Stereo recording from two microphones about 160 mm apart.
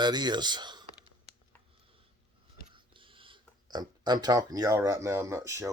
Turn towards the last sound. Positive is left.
turn(degrees=-15)  # may be behind; listen again after turning